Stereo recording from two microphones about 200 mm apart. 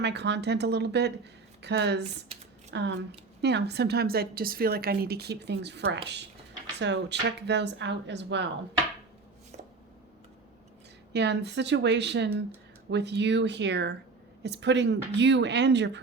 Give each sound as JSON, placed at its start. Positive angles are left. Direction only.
{"t": 0.0, "sound": "a woman's voice", "side_deg": -60}
{"t": 11.1, "sound": "speech", "side_deg": -55}